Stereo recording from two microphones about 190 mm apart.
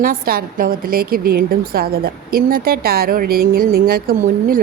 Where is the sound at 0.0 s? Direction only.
50° right (ahead or behind).